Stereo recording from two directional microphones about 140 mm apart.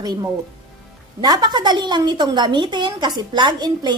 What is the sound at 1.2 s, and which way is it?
A woman's voice, 30° right (ahead or behind).